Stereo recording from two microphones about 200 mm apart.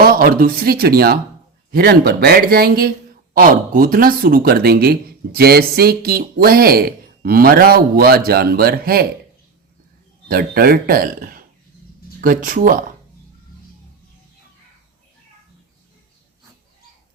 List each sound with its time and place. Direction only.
0.0 s speech: 45° right (ahead or behind)
10.2 s speech: 50° right (ahead or behind)